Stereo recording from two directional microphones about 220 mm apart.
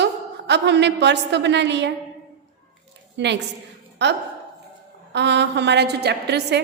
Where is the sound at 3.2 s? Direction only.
55° right (ahead or behind).